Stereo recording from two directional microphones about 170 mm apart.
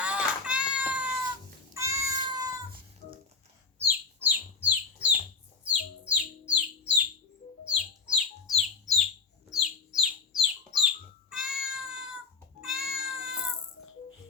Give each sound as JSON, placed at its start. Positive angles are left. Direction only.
{"t": 0.0, "sound": "cat", "side_deg": -5}
{"t": 3.8, "sound": "bird", "side_deg": -10}
{"t": 5.6, "sound": "music", "side_deg": -10}
{"t": 8.0, "sound": "bird", "side_deg": -5}
{"t": 12.6, "sound": "cat", "side_deg": 0}